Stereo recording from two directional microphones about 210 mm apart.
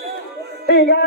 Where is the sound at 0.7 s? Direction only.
50° left (ahead or behind).